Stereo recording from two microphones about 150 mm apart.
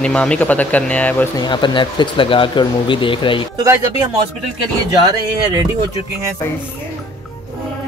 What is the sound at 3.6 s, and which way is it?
Speech, 20° right (ahead or behind).